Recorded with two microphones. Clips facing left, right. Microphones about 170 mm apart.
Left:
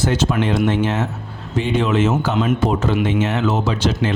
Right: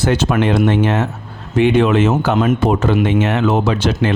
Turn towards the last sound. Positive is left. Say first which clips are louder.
# right 3 dB
turn(degrees=-60)  # may be behind; listen again after turning